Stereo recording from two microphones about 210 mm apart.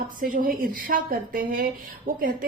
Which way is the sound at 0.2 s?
40° right (ahead or behind).